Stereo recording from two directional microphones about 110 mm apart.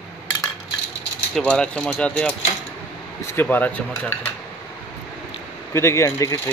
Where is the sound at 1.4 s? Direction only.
10° left (ahead or behind).